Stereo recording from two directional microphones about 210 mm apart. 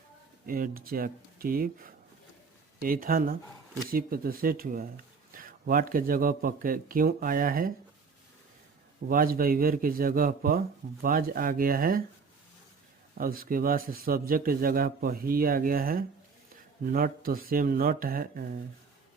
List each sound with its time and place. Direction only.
0.4 s a man's voice: 45° right (ahead or behind)
9.0 s a man's voice: 45° right (ahead or behind)
13.1 s a man's voice: 45° right (ahead or behind)